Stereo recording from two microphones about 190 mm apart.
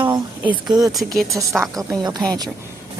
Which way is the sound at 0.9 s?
Centre (ahead or behind).